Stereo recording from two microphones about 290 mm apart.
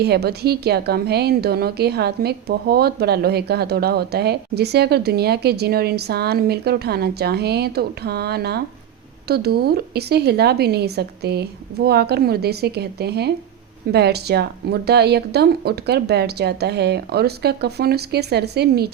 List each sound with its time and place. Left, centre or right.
0.0 s a woman's voice: right